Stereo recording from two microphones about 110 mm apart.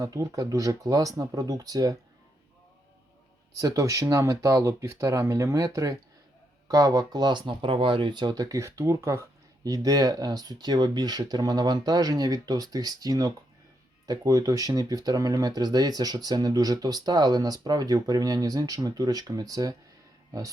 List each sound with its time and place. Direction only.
0.0 s speech: 30° right (ahead or behind)
3.6 s speech: 30° right (ahead or behind)